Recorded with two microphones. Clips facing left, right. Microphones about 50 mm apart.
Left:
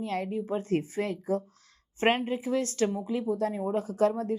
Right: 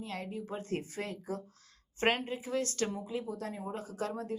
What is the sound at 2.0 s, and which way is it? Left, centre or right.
A woman's voice, left.